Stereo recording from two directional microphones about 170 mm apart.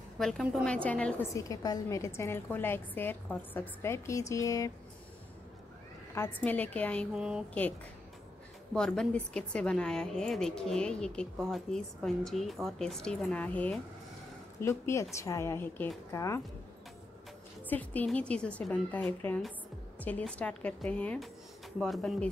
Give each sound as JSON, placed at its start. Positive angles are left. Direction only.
{"t": 0.2, "sound": "a woman's voice", "side_deg": 5}
{"t": 1.3, "sound": "a woman's voice", "side_deg": 20}
{"t": 6.1, "sound": "a woman's voice", "side_deg": 10}
{"t": 7.2, "sound": "a woman's voice", "side_deg": -5}
{"t": 8.7, "sound": "a woman's voice", "side_deg": 5}
{"t": 17.6, "sound": "a woman's voice", "side_deg": 10}